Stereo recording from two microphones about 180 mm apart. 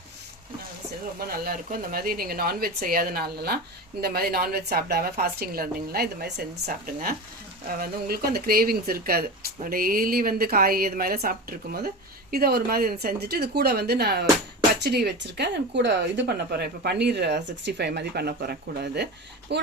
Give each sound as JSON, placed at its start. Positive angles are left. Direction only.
{"t": 1.3, "sound": "a woman's voice", "side_deg": -55}